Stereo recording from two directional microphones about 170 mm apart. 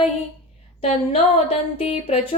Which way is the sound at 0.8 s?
35° left (ahead or behind).